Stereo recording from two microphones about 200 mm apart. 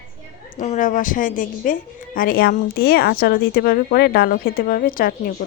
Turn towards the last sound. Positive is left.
turn(degrees=45)  # may be behind; listen again after turning